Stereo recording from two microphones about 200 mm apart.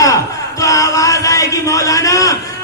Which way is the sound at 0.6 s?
15° left (ahead or behind).